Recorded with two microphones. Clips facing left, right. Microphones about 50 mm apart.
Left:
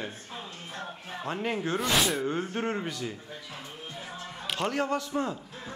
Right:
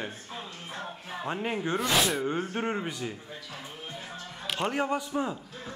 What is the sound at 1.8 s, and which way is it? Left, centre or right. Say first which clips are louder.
Speech: right 1 dB; centre.